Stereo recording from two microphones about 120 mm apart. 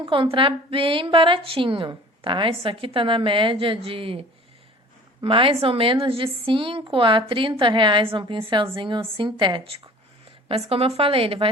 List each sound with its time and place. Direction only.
0.0 s a woman's voice: 45° right (ahead or behind)